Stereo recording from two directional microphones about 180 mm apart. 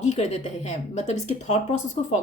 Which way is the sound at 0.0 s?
40° left (ahead or behind).